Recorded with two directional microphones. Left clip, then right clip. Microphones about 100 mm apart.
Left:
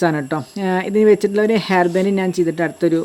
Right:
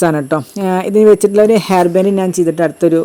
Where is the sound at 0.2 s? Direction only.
20° right (ahead or behind).